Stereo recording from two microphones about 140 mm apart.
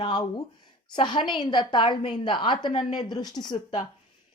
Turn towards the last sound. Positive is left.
turn(degrees=30)  # may be behind; listen again after turning